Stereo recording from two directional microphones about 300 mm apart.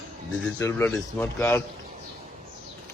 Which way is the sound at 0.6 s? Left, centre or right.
Centre.